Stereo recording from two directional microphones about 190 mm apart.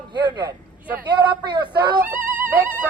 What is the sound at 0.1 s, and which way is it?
Speech, 25° right (ahead or behind).